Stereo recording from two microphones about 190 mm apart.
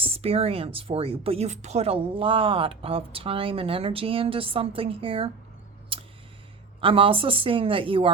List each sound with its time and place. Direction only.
0.0 s speech: 30° right (ahead or behind)
5.9 s a sound: 30° right (ahead or behind)
6.8 s speech: 30° right (ahead or behind)